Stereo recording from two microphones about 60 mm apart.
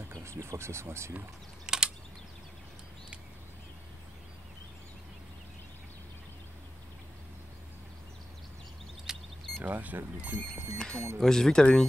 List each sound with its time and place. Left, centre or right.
0.1 s speech: right
1.7 s typing: centre
9.1 s vehicle: centre
9.6 s speech: right
10.5 s speech: centre